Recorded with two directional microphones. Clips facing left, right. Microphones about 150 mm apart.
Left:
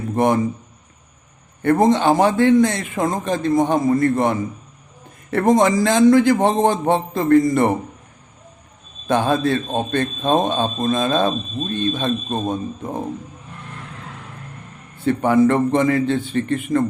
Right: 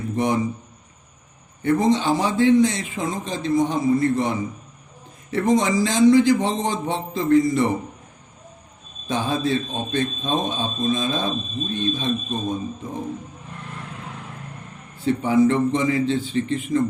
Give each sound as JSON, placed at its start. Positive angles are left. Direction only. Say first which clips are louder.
{"t": 0.2, "sound": "speech", "louder": "left 5 dB", "side_deg": 50}
{"t": 1.6, "sound": "a man's voice", "louder": "left 4 dB", "side_deg": 55}
{"t": 9.0, "sound": "a man's voice", "louder": "left 5 dB", "side_deg": 60}
{"t": 15.0, "sound": "a man's voice", "louder": "left 2 dB", "side_deg": 60}